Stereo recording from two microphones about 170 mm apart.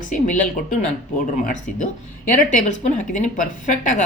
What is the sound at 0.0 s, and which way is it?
A woman's voice, 50° left (ahead or behind).